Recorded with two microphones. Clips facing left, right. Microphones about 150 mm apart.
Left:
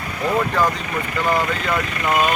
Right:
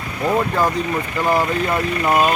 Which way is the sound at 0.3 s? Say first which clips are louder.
Right 1 dB; 20° right (ahead or behind).